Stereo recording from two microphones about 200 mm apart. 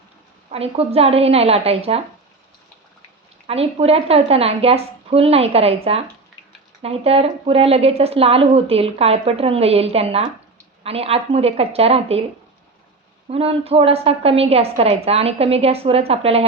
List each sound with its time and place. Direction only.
0.5 s a woman's voice: 30° right (ahead or behind)
3.4 s a woman's voice: 30° right (ahead or behind)
13.2 s a woman's voice: 30° right (ahead or behind)